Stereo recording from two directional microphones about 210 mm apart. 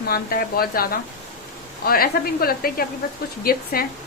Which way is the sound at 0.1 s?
45° left (ahead or behind).